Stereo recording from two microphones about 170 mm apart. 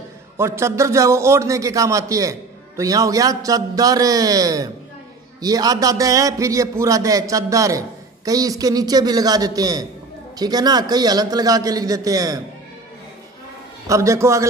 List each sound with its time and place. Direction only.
0.4 s a man's voice: 15° right (ahead or behind)
13.8 s a man's voice: 15° right (ahead or behind)